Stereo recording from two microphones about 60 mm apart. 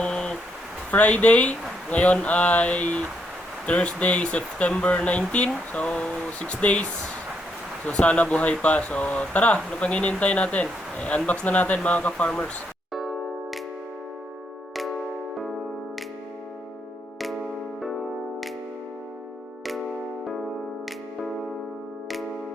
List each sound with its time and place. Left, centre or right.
0.0 s a sound: centre
0.9 s speech: left
12.9 s music: centre